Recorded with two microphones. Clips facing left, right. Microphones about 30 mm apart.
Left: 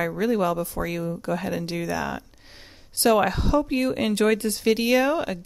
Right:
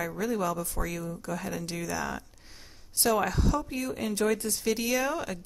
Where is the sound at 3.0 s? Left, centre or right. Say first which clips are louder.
Left 6 dB; left.